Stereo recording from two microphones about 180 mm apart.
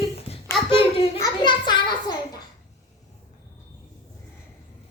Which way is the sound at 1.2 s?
25° left (ahead or behind).